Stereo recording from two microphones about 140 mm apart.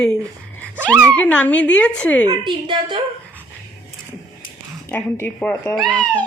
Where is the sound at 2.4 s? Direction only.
35° right (ahead or behind).